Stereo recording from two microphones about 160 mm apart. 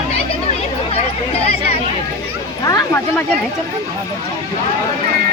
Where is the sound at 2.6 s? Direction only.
20° left (ahead or behind).